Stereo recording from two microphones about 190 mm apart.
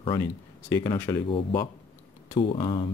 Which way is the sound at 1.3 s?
25° left (ahead or behind).